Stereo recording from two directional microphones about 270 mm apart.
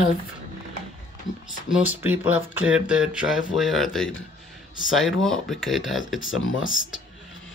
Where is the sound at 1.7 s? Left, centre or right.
Centre.